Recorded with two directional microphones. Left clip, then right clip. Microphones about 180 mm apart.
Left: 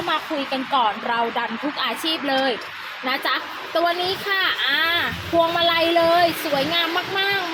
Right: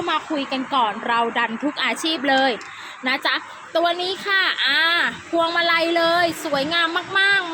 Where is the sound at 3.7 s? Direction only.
10° right (ahead or behind).